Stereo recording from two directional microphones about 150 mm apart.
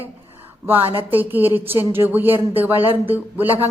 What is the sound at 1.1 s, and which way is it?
A woman's voice, 10° right (ahead or behind).